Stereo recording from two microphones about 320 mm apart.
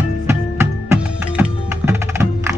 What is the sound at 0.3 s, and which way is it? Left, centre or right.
Music, centre.